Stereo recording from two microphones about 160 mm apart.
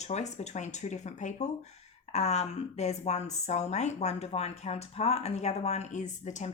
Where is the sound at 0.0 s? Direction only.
45° left (ahead or behind).